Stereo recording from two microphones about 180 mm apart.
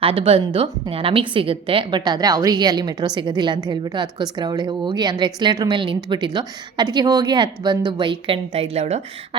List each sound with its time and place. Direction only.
0.0 s a woman's voice: 30° right (ahead or behind)